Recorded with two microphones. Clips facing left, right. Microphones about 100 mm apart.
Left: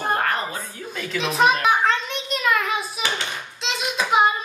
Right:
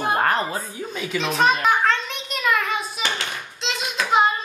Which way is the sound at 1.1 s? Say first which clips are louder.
Left 1 dB; 5° left (ahead or behind).